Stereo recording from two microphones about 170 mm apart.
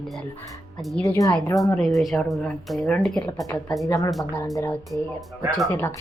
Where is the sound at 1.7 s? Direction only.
5° left (ahead or behind).